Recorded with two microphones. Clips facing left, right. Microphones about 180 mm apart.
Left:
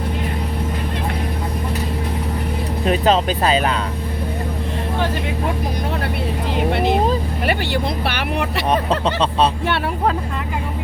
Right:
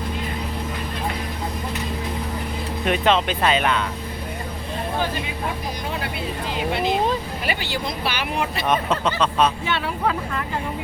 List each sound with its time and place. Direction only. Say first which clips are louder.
2.8 s speech: left 3 dB; 35° left (ahead or behind)
6.6 s speech: left 4 dB; 60° left (ahead or behind)
8.7 s speech: left 3 dB; 35° left (ahead or behind)